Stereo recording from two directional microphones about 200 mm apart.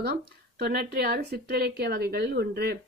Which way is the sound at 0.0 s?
50° right (ahead or behind).